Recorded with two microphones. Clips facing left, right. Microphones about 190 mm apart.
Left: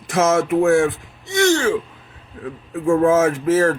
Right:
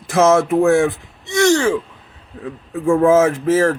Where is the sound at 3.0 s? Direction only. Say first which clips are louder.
Right 4 dB; 30° right (ahead or behind).